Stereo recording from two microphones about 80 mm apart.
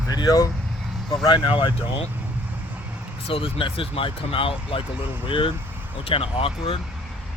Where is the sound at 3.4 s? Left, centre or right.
Left.